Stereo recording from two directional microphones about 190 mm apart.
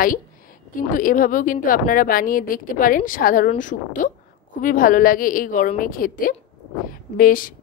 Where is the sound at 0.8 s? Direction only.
45° left (ahead or behind).